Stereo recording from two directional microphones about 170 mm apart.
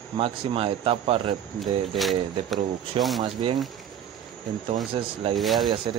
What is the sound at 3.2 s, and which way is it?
Speech, 30° right (ahead or behind).